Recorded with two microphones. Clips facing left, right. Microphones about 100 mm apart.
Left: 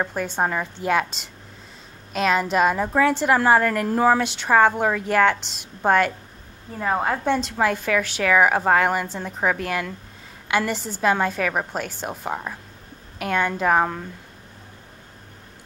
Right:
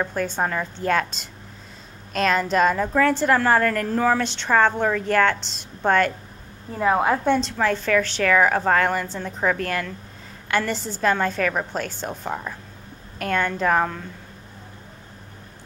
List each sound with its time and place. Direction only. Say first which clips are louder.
0.1 s a woman's voice: even; 5° left (ahead or behind)
4.2 s a woman's voice: left 2 dB; 5° left (ahead or behind)
6.8 s a woman's voice: right 3 dB; 10° right (ahead or behind)
7.2 s a woman's voice: right 1 dB; 5° left (ahead or behind)